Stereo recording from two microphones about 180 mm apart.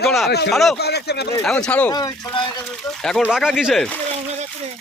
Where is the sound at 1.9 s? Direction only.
20° left (ahead or behind).